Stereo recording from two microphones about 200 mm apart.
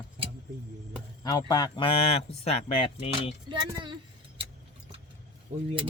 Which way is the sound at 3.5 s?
25° right (ahead or behind).